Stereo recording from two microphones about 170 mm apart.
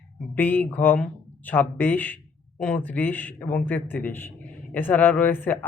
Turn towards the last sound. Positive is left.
turn(degrees=10)  # may be behind; listen again after turning